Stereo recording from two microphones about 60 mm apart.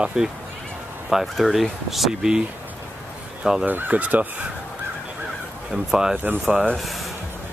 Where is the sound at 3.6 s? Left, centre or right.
Right.